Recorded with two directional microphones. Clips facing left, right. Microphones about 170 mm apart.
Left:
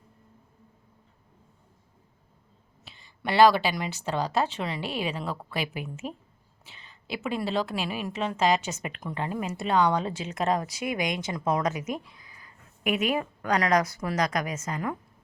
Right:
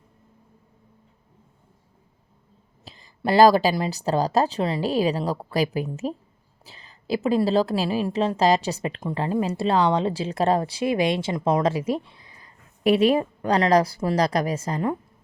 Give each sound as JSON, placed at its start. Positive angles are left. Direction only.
{"t": 2.8, "sound": "a woman's voice", "side_deg": -35}